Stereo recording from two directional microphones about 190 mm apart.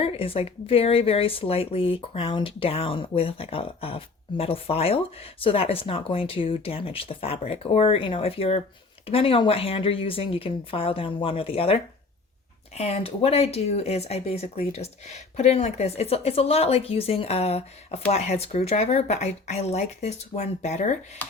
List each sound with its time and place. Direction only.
0.0 s speech: 30° left (ahead or behind)